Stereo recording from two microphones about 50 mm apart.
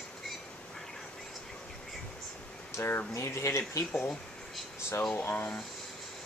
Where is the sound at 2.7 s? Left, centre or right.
Left.